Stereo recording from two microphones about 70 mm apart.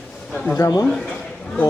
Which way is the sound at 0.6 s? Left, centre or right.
Left.